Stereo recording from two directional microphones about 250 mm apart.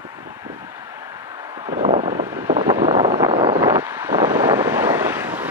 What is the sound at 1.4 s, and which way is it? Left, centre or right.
Vehicle, centre.